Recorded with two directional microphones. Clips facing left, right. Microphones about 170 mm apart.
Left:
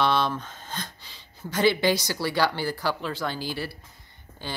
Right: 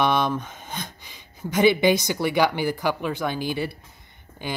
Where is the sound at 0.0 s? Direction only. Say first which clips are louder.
Right 2 dB; 15° right (ahead or behind).